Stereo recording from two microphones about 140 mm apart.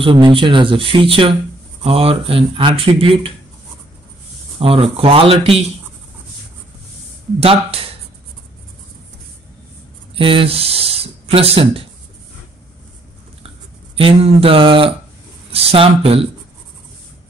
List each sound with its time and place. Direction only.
0.0 s speech: 40° right (ahead or behind)
4.6 s speech: 40° right (ahead or behind)
7.3 s speech: 45° right (ahead or behind)
10.1 s speech: 40° right (ahead or behind)
13.9 s speech: 40° right (ahead or behind)